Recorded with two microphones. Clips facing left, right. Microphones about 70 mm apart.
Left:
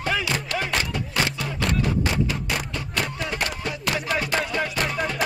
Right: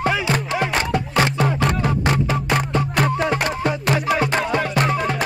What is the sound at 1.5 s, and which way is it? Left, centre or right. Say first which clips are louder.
Music: right 5 dB; right.